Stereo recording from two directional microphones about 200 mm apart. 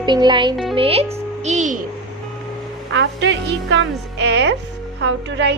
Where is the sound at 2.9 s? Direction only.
60° right (ahead or behind).